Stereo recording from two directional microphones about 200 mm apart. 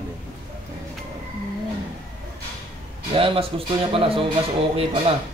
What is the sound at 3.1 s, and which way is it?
Speech, 25° right (ahead or behind).